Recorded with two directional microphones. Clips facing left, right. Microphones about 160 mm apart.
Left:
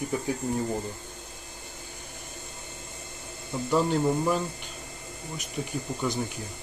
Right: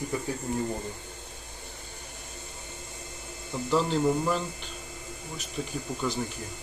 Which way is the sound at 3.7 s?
10° left (ahead or behind).